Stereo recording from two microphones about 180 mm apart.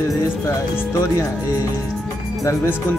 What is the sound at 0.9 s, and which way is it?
Speech, 15° left (ahead or behind).